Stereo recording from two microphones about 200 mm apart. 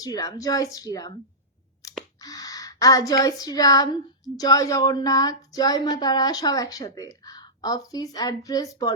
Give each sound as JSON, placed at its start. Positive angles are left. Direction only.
{"t": 0.0, "sound": "speech", "side_deg": 20}
{"t": 1.8, "sound": "a sound", "side_deg": 15}
{"t": 2.2, "sound": "speech", "side_deg": 20}